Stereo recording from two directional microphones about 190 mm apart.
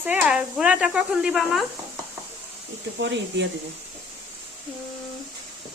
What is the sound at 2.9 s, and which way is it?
Speech, 70° right (ahead or behind).